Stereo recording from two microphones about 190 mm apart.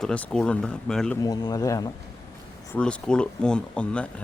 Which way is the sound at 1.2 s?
20° left (ahead or behind).